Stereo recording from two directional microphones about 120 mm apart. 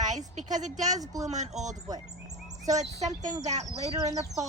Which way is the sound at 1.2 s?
75° right (ahead or behind).